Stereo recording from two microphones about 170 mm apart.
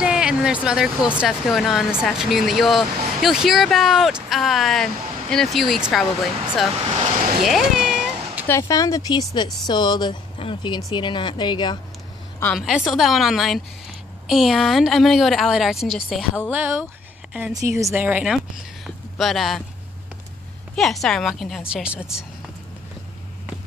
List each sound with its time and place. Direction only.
0.0 s speech: 5° right (ahead or behind)
6.8 s speech: 35° right (ahead or behind)
7.4 s cat: centre (ahead or behind)
8.5 s speech: 20° left (ahead or behind)
12.5 s speech: centre (ahead or behind)
16.4 s a woman's voice: 10° right (ahead or behind)
17.6 s speech: 20° right (ahead or behind)
18.9 s a sound: centre (ahead or behind)
20.7 s speech: centre (ahead or behind)